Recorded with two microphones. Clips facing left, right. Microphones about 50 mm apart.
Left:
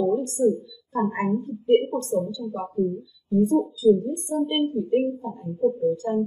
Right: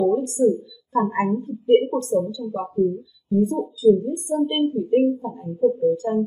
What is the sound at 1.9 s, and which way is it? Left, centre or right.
Speech, centre.